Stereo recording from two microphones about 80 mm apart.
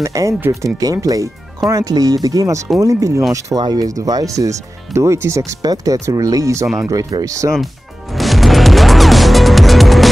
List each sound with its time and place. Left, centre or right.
0.0 s speech: right
5.6 s speech: right
8.1 s music: centre